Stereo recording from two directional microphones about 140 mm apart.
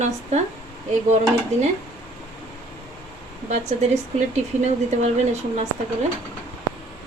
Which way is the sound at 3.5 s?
55° right (ahead or behind).